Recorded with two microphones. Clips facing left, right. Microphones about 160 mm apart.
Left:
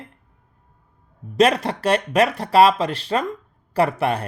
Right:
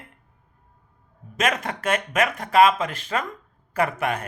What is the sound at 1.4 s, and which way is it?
Speech, 35° left (ahead or behind).